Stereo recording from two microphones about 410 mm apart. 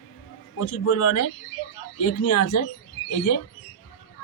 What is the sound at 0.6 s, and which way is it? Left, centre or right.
A man's voice, left.